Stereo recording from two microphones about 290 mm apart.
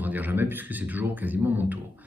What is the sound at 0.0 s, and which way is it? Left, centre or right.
A man's voice, centre.